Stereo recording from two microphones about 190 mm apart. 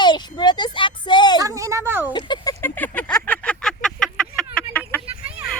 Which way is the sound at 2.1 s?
25° left (ahead or behind).